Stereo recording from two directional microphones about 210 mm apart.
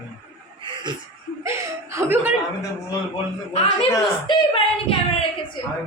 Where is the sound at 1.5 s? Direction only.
15° right (ahead or behind).